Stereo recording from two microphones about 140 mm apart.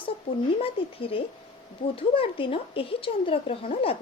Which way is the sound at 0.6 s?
40° left (ahead or behind).